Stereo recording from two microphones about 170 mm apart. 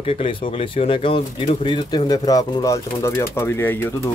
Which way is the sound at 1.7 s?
25° left (ahead or behind).